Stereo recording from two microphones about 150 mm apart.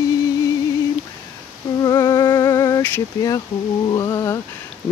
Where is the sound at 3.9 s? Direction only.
25° left (ahead or behind).